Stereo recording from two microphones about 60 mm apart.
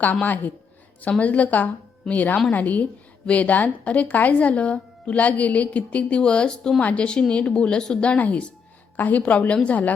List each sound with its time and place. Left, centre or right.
0.0 s a woman's voice: left